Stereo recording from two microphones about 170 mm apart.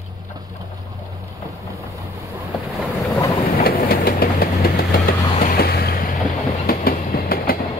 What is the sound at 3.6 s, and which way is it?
Vehicle, 65° left (ahead or behind).